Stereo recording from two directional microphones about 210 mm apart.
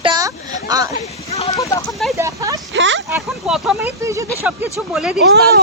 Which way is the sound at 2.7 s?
60° right (ahead or behind).